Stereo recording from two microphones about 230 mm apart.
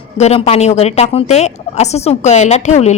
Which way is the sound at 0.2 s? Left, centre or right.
Left.